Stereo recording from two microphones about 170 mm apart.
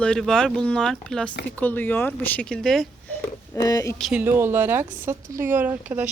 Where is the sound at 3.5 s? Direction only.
20° left (ahead or behind).